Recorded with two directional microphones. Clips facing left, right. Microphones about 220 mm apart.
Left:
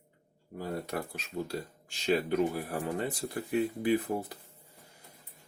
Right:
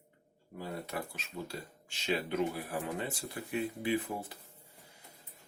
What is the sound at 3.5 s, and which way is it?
Speech, 35° left (ahead or behind).